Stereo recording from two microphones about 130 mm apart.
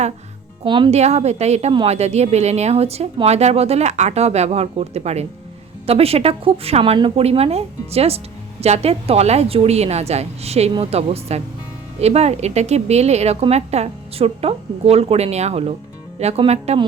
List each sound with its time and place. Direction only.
0.6 s speech: 40° right (ahead or behind)
0.9 s a woman's voice: 55° right (ahead or behind)